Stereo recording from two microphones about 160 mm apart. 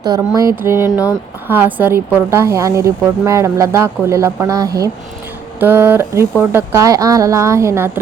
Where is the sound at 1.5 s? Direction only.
10° right (ahead or behind).